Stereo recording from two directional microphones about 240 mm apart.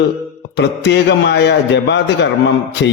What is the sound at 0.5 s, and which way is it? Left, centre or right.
Mantra, left.